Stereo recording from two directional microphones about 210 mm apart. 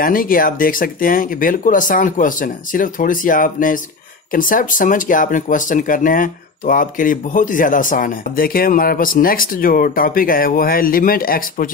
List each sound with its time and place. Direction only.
0.0 s speech: 40° left (ahead or behind)